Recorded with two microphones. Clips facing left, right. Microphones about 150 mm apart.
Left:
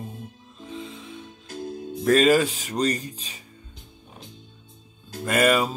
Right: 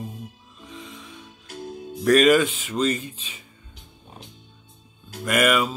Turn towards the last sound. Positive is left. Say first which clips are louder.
# even
turn(degrees=35)  # may be behind; listen again after turning